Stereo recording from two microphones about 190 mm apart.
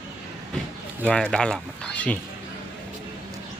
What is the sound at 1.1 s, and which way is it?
Speech, 5° left (ahead or behind).